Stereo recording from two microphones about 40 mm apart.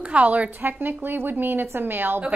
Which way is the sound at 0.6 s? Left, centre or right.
Right.